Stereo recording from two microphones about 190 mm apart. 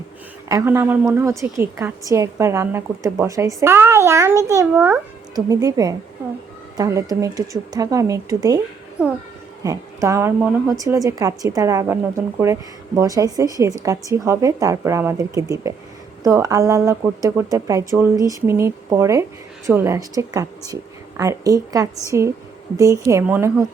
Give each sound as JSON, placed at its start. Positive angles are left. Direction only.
{"t": 0.4, "sound": "a woman's voice", "side_deg": -15}
{"t": 9.0, "sound": "a woman's voice", "side_deg": -5}
{"t": 9.6, "sound": "a woman's voice", "side_deg": -15}